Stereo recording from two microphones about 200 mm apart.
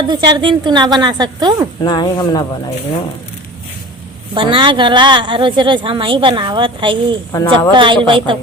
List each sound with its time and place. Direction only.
0.1 s a woman's voice: 20° right (ahead or behind)
1.8 s speech: 20° left (ahead or behind)
4.4 s a woman's voice: 25° right (ahead or behind)
7.3 s speech: 15° left (ahead or behind)
7.7 s a woman's voice: 25° right (ahead or behind)